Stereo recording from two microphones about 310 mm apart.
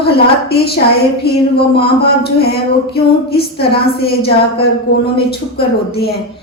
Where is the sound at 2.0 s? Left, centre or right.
Left.